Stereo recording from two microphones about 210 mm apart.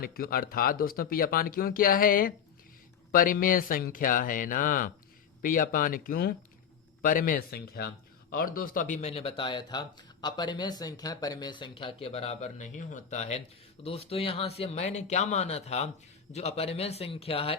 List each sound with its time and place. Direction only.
0.0 s speech: 45° left (ahead or behind); by 17.6 s 25° left (ahead or behind)